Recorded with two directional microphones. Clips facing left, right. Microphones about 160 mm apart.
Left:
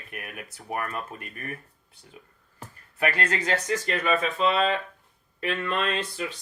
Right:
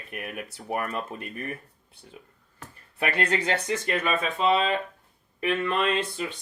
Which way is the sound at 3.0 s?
25° right (ahead or behind).